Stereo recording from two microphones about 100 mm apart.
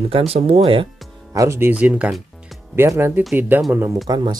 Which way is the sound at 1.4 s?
25° right (ahead or behind).